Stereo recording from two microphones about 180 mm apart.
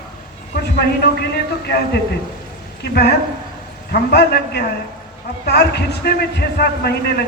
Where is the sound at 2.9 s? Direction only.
65° left (ahead or behind).